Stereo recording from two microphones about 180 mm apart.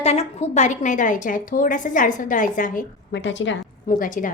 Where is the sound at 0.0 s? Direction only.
35° left (ahead or behind).